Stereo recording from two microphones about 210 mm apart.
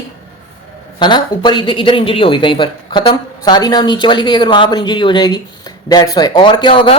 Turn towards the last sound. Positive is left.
turn(degrees=25)  # may be behind; listen again after turning